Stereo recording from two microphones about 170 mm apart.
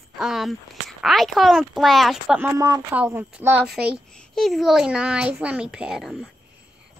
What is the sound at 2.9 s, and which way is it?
A child's voice, 10° right (ahead or behind).